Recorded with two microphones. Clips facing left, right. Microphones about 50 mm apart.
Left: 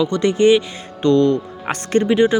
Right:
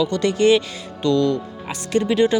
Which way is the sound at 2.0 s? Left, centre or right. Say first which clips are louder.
Left 2 dB; left.